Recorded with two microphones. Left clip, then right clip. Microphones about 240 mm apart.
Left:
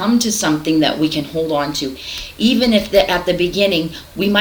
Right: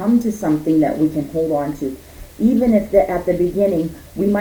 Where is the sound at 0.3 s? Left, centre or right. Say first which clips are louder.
Left 1 dB; centre.